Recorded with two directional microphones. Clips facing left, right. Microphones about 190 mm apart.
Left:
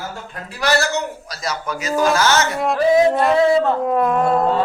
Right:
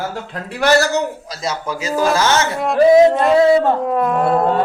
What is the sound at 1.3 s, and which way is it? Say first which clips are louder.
Speech: right 2 dB; 25° right (ahead or behind).